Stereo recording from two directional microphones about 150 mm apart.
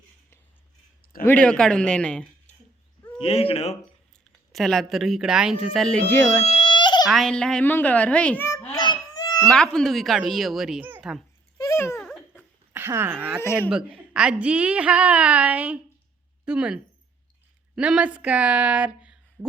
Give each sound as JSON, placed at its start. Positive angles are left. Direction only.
{"t": 1.2, "sound": "speech", "side_deg": 10}
{"t": 3.2, "sound": "speech", "side_deg": 40}
{"t": 4.5, "sound": "a woman's voice", "side_deg": 5}
{"t": 6.4, "sound": "baby cry", "side_deg": 40}
{"t": 7.1, "sound": "a child's voice", "side_deg": 5}
{"t": 8.8, "sound": "honk", "side_deg": 30}
{"t": 9.4, "sound": "a woman's voice", "side_deg": 5}
{"t": 11.5, "sound": "a sound", "side_deg": 20}
{"t": 11.9, "sound": "a sound", "side_deg": 0}
{"t": 13.6, "sound": "a woman's voice", "side_deg": -10}